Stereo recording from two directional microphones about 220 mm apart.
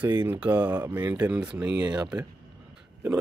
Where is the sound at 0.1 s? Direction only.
15° right (ahead or behind).